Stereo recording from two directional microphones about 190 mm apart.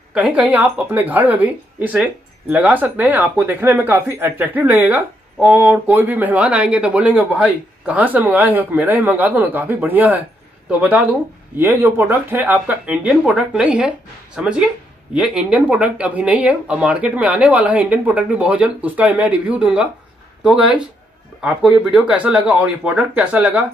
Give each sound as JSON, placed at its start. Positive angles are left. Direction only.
{"t": 0.1, "sound": "speech", "side_deg": -5}